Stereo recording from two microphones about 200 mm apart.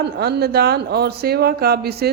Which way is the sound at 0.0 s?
55° right (ahead or behind).